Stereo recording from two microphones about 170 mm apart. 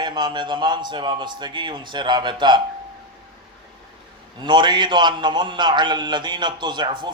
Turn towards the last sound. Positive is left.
turn(degrees=-25)  # may be behind; listen again after turning